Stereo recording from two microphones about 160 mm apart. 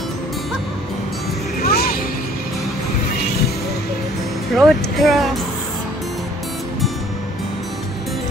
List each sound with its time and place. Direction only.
1.6 s music: 70° left (ahead or behind)
4.6 s speech: centre (ahead or behind)